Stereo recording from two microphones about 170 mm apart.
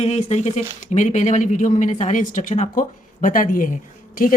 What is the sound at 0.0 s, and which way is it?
Speech, 40° left (ahead or behind).